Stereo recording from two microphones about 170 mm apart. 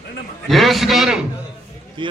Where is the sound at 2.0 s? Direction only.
30° right (ahead or behind).